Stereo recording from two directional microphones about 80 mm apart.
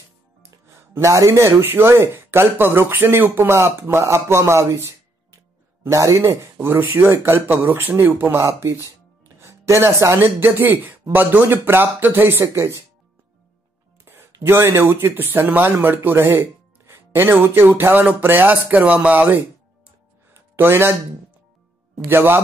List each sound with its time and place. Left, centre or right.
0.4 s music: right
1.6 s speech: right
6.6 s speech: right
14.0 s speech: right
20.3 s a sound: right
22.0 s speech: right